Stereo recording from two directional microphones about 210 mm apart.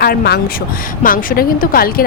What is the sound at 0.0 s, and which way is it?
Speech, 45° left (ahead or behind).